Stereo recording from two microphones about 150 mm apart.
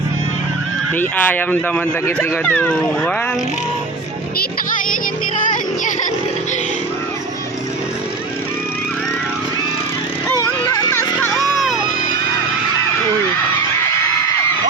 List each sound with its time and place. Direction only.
0.9 s speech: 10° left (ahead or behind)
10.7 s a sound: 20° left (ahead or behind)
11.3 s music: centre (ahead or behind)